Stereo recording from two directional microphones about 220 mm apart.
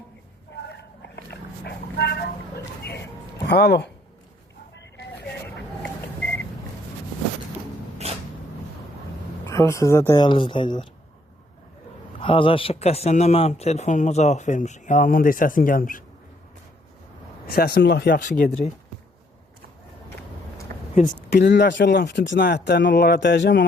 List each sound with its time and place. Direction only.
0.7 s a sound: 50° left (ahead or behind)
1.6 s vehicle: 50° left (ahead or behind)
3.4 s speech: 45° left (ahead or behind)
4.7 s a sound: 55° left (ahead or behind)
8.0 s a sound: 30° right (ahead or behind)
9.5 s speech: 15° left (ahead or behind)
12.2 s speech: 25° left (ahead or behind); by 16.0 s 40° left (ahead or behind)
17.5 s speech: 45° left (ahead or behind)
20.9 s speech: 35° left (ahead or behind)
21.2 s speech: 50° left (ahead or behind)